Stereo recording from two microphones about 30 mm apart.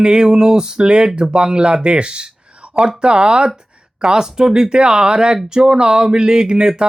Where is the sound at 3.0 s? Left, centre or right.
Right.